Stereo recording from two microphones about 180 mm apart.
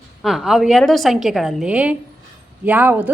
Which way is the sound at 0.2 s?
Centre (ahead or behind).